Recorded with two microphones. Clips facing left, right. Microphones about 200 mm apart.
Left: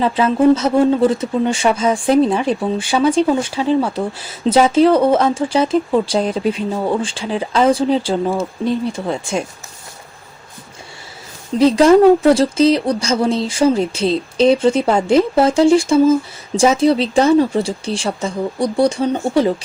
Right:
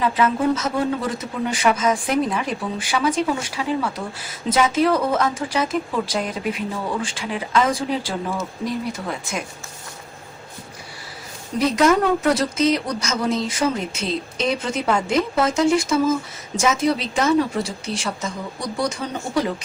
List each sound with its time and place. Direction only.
0.0 s speech: 30° left (ahead or behind)
11.6 s a woman's voice: 30° left (ahead or behind)